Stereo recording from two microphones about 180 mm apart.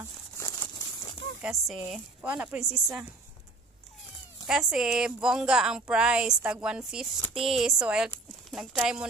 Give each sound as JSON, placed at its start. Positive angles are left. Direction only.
{"t": 0.4, "sound": "crumpling", "side_deg": 15}
{"t": 1.4, "sound": "speech", "side_deg": 0}
{"t": 4.5, "sound": "speech", "side_deg": -5}